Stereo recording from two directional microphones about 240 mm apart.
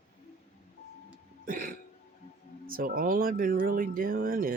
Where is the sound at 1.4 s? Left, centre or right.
Right.